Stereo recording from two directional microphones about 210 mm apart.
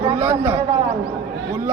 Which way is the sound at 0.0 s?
15° right (ahead or behind).